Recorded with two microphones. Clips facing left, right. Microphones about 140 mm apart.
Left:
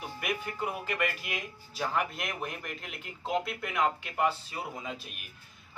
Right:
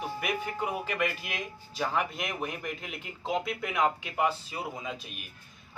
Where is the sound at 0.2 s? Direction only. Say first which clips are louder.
Left 1 dB; centre (ahead or behind).